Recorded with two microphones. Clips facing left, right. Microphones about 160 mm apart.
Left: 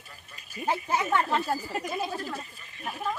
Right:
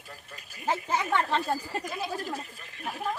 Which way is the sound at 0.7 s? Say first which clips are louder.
Left 1 dB; 10° left (ahead or behind).